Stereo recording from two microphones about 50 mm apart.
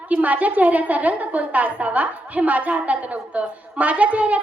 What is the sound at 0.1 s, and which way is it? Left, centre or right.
A woman's voice, right.